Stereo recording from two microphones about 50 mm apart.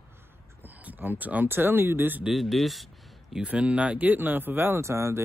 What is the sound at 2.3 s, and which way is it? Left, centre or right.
Speech, centre.